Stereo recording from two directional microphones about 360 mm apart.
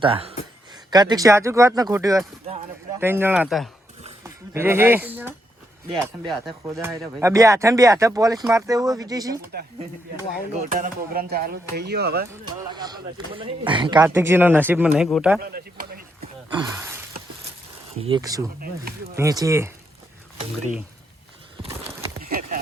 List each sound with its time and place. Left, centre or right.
0.0 s speech: centre
10.7 s speech: right
12.3 s speech: centre
15.4 s a sound: right
16.5 s gasp: centre
18.0 s speech: centre
22.2 s a sound: right